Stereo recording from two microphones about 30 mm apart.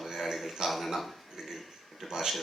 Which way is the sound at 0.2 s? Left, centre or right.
Centre.